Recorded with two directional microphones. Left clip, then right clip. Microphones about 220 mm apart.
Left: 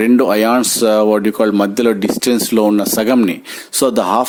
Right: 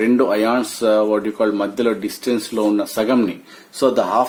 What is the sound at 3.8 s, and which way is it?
Speech, 50° left (ahead or behind).